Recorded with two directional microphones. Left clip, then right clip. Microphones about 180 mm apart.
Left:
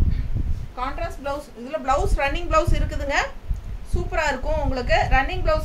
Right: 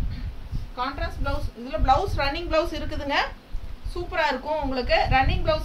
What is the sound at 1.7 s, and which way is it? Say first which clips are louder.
A woman's voice: right 1 dB; 20° left (ahead or behind).